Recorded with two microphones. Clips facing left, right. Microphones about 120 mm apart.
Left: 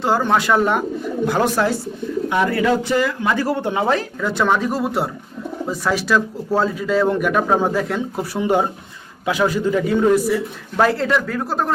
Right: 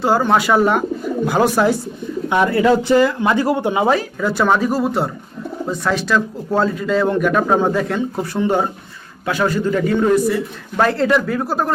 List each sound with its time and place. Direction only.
0.0 s speech: 5° right (ahead or behind)
2.3 s speech: 25° right (ahead or behind)
3.4 s a man's voice: 15° right (ahead or behind)